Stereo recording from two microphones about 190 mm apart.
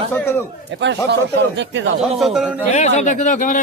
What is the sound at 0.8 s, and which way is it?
A man's voice, 65° right (ahead or behind).